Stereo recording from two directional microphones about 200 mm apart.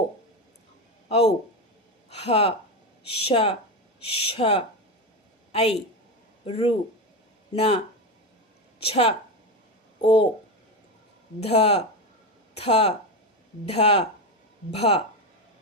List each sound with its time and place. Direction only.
1.0 s speech: 30° left (ahead or behind)
5.5 s a sound: 30° left (ahead or behind)
6.4 s speech: 30° left (ahead or behind)
8.8 s speech: 30° left (ahead or behind)
11.3 s speech: 30° left (ahead or behind)